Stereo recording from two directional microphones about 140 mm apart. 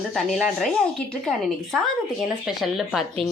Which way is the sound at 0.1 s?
Centre (ahead or behind).